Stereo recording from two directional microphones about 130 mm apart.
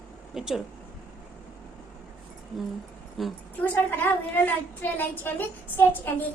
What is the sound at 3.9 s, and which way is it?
A woman's voice, 15° left (ahead or behind).